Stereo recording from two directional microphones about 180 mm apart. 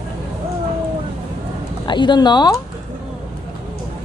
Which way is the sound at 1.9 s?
25° left (ahead or behind).